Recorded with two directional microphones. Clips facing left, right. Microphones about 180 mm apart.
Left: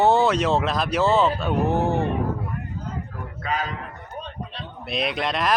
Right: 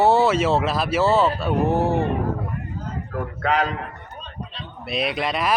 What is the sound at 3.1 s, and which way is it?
Speech, 70° right (ahead or behind).